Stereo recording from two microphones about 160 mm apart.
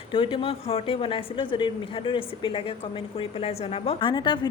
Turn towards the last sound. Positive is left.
turn(degrees=30)  # may be behind; listen again after turning